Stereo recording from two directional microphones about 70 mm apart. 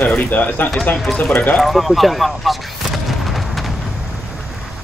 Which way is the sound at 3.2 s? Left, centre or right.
Centre.